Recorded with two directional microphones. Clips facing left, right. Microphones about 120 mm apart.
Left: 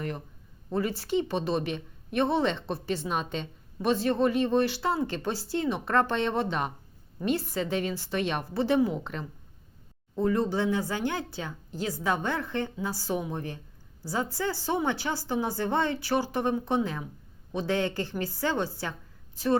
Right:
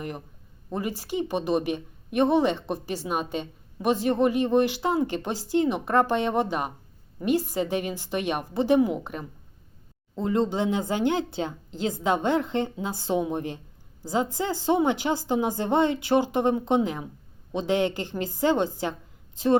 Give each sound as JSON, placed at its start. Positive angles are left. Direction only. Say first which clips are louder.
{"t": 0.7, "sound": "a woman's voice", "louder": "left 2 dB", "side_deg": -15}